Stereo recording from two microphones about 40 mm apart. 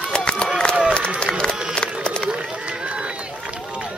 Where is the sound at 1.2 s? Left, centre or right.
Left.